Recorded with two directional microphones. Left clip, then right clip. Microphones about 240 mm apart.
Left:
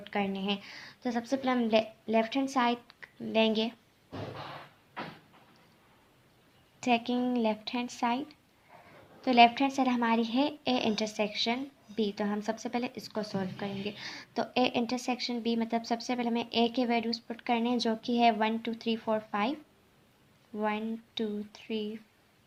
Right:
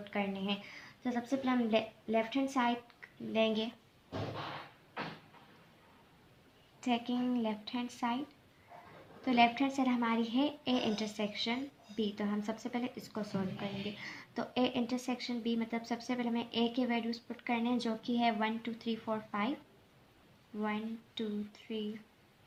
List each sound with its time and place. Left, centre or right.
0.0 s a woman's voice: left
6.7 s a woman's voice: left
20.6 s a woman's voice: left